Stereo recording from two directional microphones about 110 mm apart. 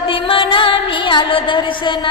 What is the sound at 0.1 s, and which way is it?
Music, 50° left (ahead or behind).